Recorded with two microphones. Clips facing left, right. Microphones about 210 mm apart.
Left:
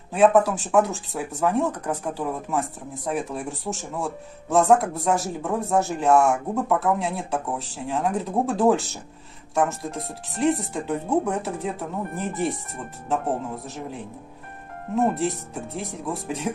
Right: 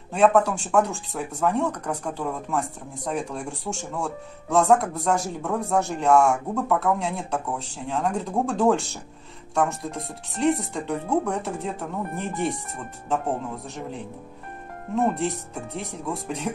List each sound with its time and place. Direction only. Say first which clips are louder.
0.1 s speech: left 1 dB; 5° left (ahead or behind)
10.4 s speech: even; centre (ahead or behind)
15.1 s speech: left 1 dB; centre (ahead or behind)